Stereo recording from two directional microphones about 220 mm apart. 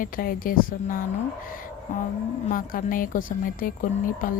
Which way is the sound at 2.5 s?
40° left (ahead or behind).